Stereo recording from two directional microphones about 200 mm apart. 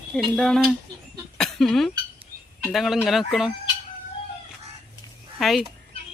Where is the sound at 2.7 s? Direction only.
Centre (ahead or behind).